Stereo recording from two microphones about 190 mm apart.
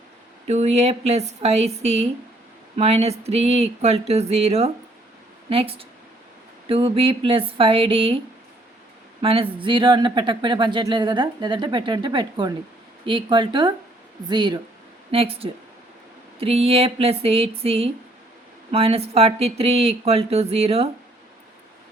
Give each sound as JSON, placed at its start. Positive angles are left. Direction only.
{"t": 0.4, "sound": "speech", "side_deg": -35}
{"t": 9.2, "sound": "speech", "side_deg": -30}